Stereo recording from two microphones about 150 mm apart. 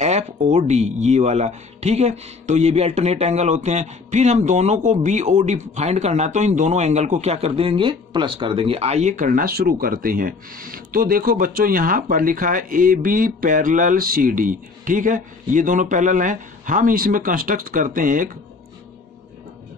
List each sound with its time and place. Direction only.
0.0 s speech: 50° right (ahead or behind)